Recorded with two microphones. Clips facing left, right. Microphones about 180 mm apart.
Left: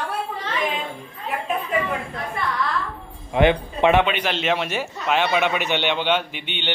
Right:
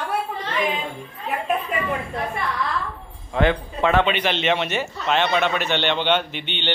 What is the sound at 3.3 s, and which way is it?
Speech, 20° left (ahead or behind).